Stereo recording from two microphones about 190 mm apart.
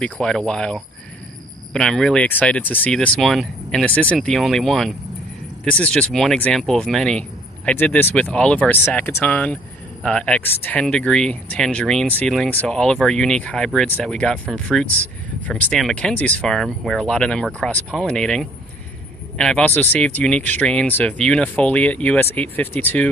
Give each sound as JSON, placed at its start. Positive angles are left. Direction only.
{"t": 0.0, "sound": "speech", "side_deg": 5}